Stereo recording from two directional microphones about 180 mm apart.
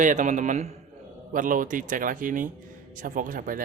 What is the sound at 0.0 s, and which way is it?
Speech, 45° right (ahead or behind).